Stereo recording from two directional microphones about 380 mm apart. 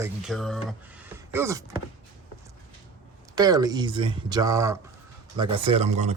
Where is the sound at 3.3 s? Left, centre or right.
Centre.